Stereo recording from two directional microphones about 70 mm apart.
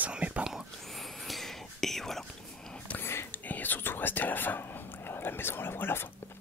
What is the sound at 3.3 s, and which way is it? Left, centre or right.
Whispering, left.